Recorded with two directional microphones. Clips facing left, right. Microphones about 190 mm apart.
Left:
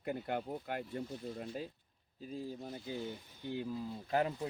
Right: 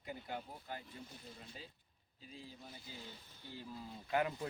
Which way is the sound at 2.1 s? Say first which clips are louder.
Left 11 dB; 45° left (ahead or behind).